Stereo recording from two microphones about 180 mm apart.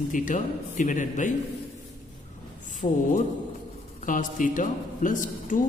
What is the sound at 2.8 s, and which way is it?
Speech, 35° left (ahead or behind).